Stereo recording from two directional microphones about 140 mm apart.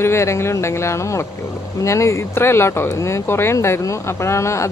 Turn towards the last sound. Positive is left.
turn(degrees=20)  # may be behind; listen again after turning